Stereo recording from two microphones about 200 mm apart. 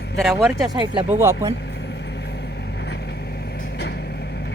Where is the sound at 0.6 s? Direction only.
20° right (ahead or behind).